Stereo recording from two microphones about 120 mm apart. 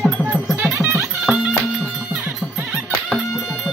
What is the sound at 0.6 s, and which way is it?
Music, 15° right (ahead or behind).